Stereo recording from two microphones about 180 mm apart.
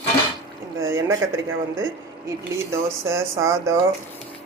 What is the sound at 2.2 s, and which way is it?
Speech, 15° right (ahead or behind).